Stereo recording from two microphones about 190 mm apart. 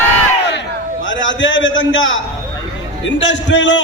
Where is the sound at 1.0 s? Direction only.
75° left (ahead or behind).